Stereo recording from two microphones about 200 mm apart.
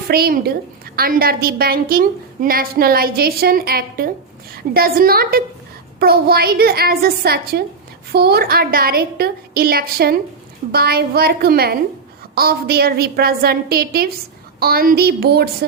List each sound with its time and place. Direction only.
0.1 s a woman's voice: 50° right (ahead or behind)